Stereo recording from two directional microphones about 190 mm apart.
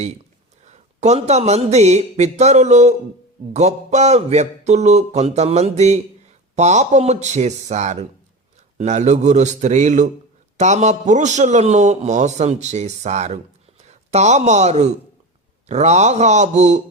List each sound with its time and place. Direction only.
0.6 s a man's voice: 35° right (ahead or behind)